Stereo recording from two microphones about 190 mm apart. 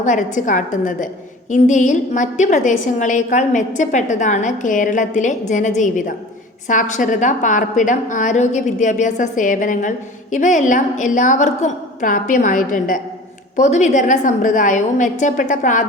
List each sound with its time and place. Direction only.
0.0 s a woman's voice: 40° left (ahead or behind)